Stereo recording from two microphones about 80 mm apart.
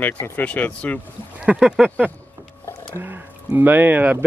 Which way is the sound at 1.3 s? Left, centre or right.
Centre.